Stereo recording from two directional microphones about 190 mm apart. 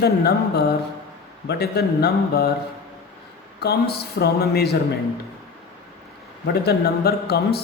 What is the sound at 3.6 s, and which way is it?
A man's voice, 60° left (ahead or behind).